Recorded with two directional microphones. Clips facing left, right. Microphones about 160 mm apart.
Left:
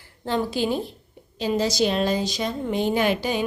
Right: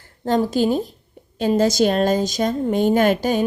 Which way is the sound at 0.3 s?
45° right (ahead or behind).